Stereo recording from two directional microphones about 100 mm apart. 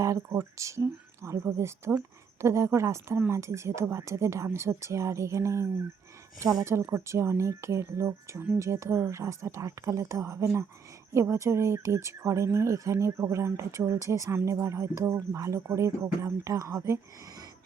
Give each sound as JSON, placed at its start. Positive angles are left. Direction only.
{"t": 0.0, "sound": "speech", "side_deg": -30}